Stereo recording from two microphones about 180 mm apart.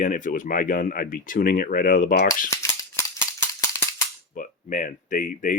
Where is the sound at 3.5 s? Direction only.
15° left (ahead or behind).